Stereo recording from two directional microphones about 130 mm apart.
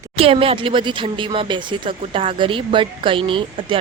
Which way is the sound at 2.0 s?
50° right (ahead or behind).